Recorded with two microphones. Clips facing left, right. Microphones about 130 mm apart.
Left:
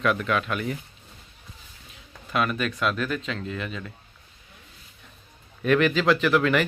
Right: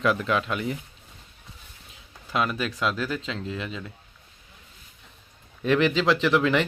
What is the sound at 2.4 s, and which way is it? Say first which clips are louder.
Speech: left 1 dB; 20° right (ahead or behind).